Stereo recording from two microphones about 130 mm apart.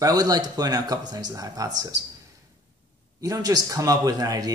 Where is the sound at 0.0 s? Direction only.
30° right (ahead or behind).